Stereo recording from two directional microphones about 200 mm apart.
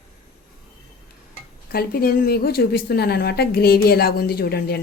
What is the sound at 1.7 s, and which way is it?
A woman's voice, 50° left (ahead or behind).